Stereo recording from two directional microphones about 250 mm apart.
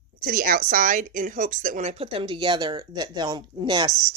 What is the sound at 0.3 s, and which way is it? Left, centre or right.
A woman's voice, right.